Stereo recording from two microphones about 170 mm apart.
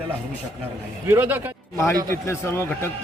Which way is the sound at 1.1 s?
10° right (ahead or behind).